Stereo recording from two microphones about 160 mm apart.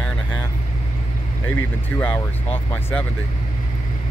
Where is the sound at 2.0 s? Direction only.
10° left (ahead or behind).